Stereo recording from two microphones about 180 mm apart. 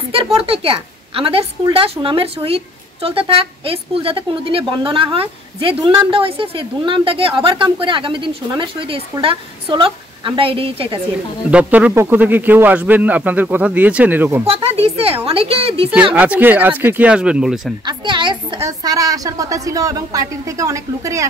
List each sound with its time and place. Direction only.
0.1 s a woman's voice: 30° right (ahead or behind)
11.5 s speech: 10° right (ahead or behind)
14.4 s a woman's voice: 35° right (ahead or behind)
16.2 s speech: 10° right (ahead or behind)
17.8 s a woman's voice: 25° right (ahead or behind)